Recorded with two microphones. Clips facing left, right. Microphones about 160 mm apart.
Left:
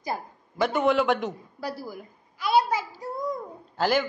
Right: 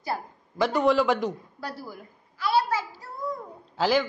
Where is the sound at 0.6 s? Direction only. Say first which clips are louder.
Right 1 dB; centre (ahead or behind); by 3.1 s 15° left (ahead or behind).